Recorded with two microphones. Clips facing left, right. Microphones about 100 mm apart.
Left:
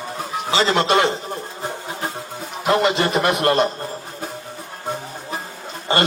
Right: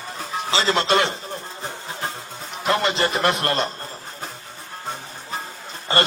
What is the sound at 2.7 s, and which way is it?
A man's voice, 25° left (ahead or behind).